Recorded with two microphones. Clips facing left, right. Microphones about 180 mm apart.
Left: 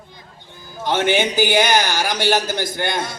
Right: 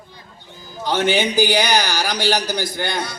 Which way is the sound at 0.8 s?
20° left (ahead or behind).